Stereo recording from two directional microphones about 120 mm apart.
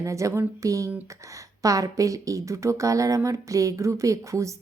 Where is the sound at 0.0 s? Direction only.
25° right (ahead or behind).